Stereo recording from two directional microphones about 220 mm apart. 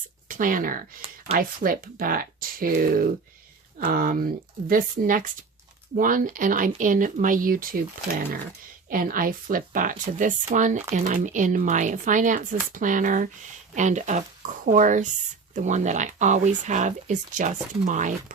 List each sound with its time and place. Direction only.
0.3 s speech: 35° right (ahead or behind)
1.0 s a sound: 25° right (ahead or behind)
1.4 s speech: 40° right (ahead or behind)
8.9 s speech: 40° right (ahead or behind)